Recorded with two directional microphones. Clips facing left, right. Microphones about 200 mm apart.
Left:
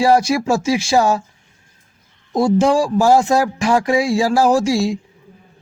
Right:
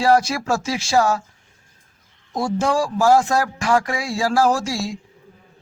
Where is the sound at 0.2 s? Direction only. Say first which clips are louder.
Left 5 dB; 15° left (ahead or behind).